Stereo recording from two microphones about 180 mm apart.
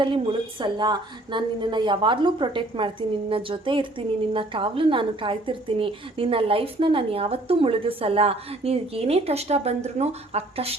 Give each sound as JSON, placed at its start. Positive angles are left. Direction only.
{"t": 0.6, "sound": "a woman's voice", "side_deg": -25}